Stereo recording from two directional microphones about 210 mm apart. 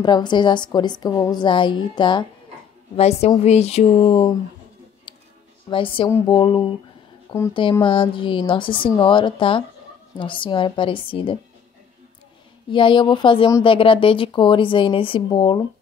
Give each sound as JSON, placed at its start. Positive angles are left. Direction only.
{"t": 0.0, "sound": "speech", "side_deg": 20}
{"t": 5.1, "sound": "a sound", "side_deg": 20}
{"t": 5.7, "sound": "speech", "side_deg": 25}
{"t": 12.7, "sound": "speech", "side_deg": 25}